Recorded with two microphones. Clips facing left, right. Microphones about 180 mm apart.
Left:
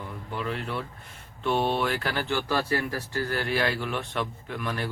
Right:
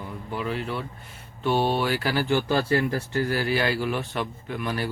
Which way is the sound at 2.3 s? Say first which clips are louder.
Right 4 dB; 20° right (ahead or behind).